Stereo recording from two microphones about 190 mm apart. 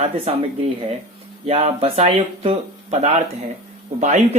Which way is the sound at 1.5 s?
35° right (ahead or behind).